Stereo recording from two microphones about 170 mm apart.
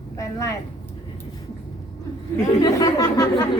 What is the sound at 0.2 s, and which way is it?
Speech, 20° left (ahead or behind).